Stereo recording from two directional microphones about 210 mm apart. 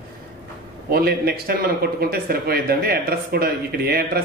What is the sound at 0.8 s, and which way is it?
A man's voice, 45° right (ahead or behind).